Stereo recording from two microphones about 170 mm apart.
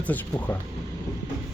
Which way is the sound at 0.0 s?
10° left (ahead or behind).